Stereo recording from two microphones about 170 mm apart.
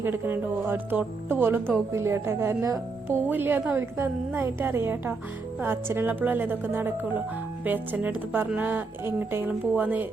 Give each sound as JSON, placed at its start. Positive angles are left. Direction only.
{"t": 0.0, "sound": "speech", "side_deg": -15}